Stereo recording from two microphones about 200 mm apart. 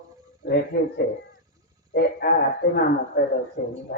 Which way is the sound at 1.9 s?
50° left (ahead or behind).